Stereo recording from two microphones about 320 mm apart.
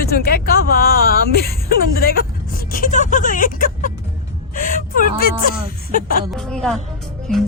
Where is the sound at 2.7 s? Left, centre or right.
Left.